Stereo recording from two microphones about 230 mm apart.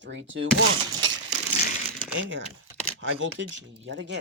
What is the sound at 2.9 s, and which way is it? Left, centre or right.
Speech, right.